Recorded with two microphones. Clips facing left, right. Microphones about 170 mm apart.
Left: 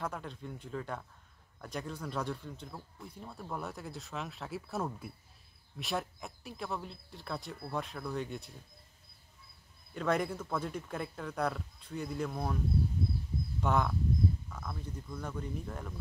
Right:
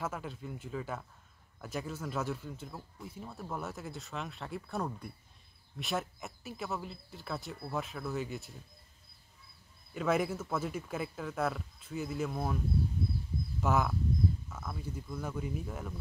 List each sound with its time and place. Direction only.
0.0 s speech: 5° right (ahead or behind)
9.9 s speech: 5° right (ahead or behind)
13.6 s speech: 5° right (ahead or behind)